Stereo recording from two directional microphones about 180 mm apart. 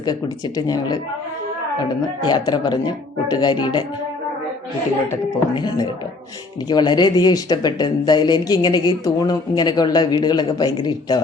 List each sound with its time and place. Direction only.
0.0 s speech: 20° left (ahead or behind)
2.2 s speech: 25° left (ahead or behind)
5.0 s speech: 20° left (ahead or behind)